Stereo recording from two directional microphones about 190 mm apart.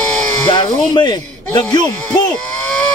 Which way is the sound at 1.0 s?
25° left (ahead or behind).